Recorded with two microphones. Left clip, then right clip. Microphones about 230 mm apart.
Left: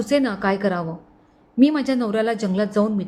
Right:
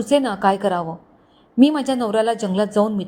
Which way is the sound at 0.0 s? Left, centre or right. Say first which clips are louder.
Right 3 dB; centre.